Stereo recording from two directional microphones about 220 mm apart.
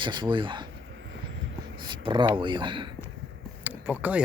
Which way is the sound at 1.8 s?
20° right (ahead or behind).